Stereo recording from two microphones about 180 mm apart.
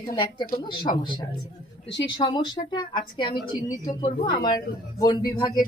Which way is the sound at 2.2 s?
25° left (ahead or behind).